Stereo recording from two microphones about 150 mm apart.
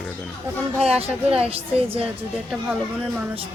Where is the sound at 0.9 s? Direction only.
5° right (ahead or behind).